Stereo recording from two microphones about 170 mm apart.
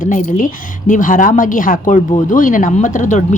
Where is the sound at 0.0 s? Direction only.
50° left (ahead or behind).